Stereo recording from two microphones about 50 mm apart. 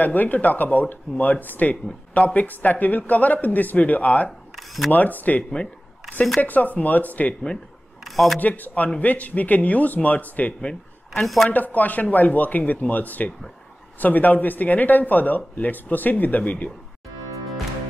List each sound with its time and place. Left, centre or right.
0.0 s speech: left
4.6 s mechanisms: centre
4.9 s speech: left
6.4 s speech: left
8.0 s a sound: centre
8.4 s speech: left
10.6 s a sound: centre
11.4 s speech: left